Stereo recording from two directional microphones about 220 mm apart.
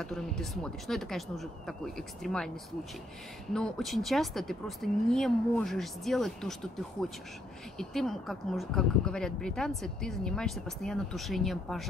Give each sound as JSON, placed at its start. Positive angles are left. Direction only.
{"t": 0.0, "sound": "speech", "side_deg": 0}
{"t": 3.5, "sound": "speech", "side_deg": 5}